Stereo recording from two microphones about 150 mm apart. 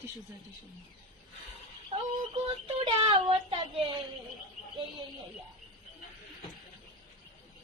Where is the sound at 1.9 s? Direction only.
40° right (ahead or behind).